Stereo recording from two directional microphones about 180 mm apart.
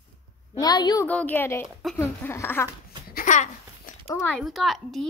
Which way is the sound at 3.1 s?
45° left (ahead or behind).